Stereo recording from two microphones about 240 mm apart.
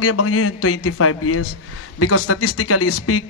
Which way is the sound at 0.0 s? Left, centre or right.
Left.